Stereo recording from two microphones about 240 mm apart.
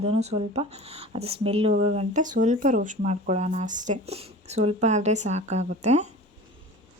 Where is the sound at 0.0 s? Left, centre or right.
Right.